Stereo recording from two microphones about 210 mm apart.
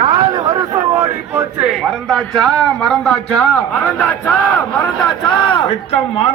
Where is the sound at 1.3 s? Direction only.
Centre (ahead or behind).